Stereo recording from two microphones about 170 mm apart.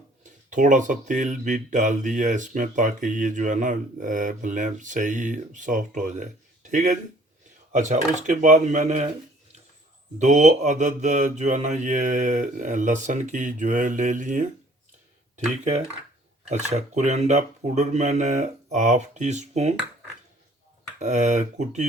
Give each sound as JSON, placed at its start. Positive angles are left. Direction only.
{"t": 0.5, "sound": "speech", "side_deg": -45}
{"t": 10.2, "sound": "speech", "side_deg": -45}
{"t": 15.6, "sound": "speech", "side_deg": -40}
{"t": 21.0, "sound": "speech", "side_deg": -45}